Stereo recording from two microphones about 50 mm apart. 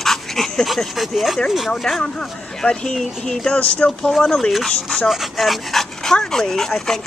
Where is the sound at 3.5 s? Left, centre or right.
Left.